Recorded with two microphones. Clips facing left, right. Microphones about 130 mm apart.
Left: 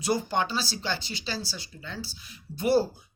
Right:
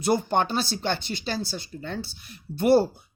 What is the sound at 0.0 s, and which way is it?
Speech, 55° right (ahead or behind).